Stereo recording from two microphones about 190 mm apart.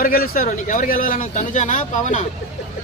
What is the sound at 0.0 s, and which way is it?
Speech, 50° left (ahead or behind).